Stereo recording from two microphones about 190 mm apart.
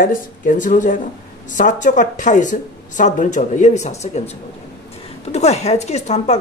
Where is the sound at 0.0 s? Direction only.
45° left (ahead or behind).